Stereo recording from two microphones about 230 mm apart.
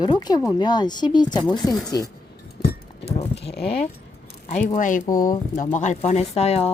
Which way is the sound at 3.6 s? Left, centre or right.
Left.